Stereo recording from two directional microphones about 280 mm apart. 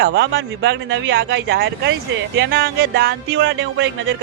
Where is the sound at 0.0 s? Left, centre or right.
Right.